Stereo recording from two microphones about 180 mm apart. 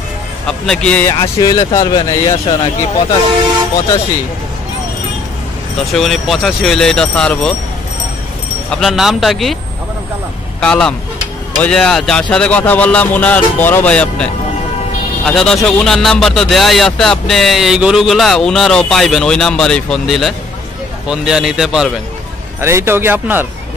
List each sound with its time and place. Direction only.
0.5 s speech: 5° left (ahead or behind)
1.4 s speech: 20° left (ahead or behind)
5.8 s speech: centre (ahead or behind)
8.6 s speech: centre (ahead or behind)
10.6 s speech: 5° left (ahead or behind)
22.6 s speech: 15° right (ahead or behind)